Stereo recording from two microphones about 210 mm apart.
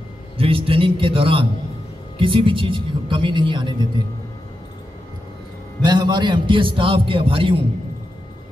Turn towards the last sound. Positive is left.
turn(degrees=-25)  # may be behind; listen again after turning